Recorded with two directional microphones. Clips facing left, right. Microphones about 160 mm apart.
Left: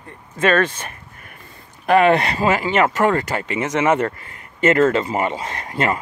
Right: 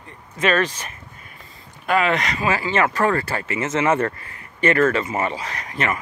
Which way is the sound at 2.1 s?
35° left (ahead or behind).